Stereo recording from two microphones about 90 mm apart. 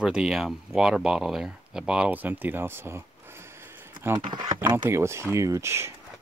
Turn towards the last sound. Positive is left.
turn(degrees=-30)  # may be behind; listen again after turning